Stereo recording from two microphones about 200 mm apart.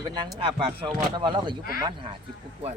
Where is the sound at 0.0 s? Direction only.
20° right (ahead or behind).